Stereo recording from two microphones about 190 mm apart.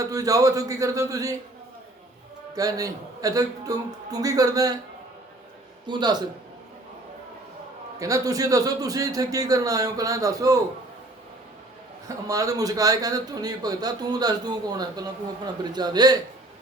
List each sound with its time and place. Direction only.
0.0 s speech: 20° right (ahead or behind)
2.6 s a man's voice: 20° right (ahead or behind)
5.8 s a man's voice: 20° right (ahead or behind)
7.9 s a man's voice: 15° right (ahead or behind)
12.0 s a man's voice: 20° right (ahead or behind)